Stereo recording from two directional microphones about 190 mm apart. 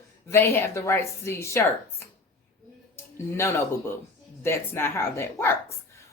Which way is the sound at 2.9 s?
15° left (ahead or behind).